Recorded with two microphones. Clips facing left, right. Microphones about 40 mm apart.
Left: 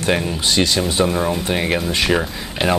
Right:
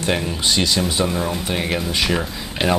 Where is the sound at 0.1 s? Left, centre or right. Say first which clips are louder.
Left 2 dB; centre.